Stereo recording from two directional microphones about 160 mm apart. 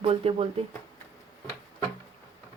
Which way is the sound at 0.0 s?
35° right (ahead or behind).